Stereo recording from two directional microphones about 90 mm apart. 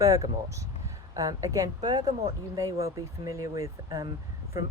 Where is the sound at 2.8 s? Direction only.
35° right (ahead or behind).